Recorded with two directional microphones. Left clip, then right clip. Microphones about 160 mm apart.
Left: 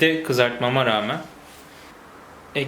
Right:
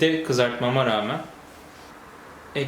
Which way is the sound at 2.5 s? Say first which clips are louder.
Left 2 dB; 10° left (ahead or behind).